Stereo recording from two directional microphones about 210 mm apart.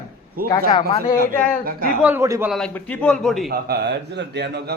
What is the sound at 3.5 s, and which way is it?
A man's voice, 50° right (ahead or behind).